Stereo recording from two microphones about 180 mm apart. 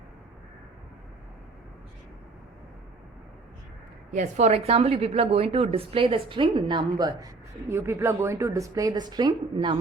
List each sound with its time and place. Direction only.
4.1 s a woman's voice: 40° right (ahead or behind); by 7.3 s 25° right (ahead or behind)
7.7 s speech: 15° right (ahead or behind)